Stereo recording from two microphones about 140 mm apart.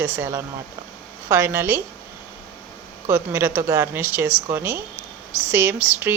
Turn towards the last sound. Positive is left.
turn(degrees=-10)  # may be behind; listen again after turning